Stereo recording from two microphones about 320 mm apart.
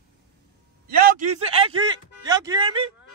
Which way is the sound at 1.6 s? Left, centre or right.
Centre.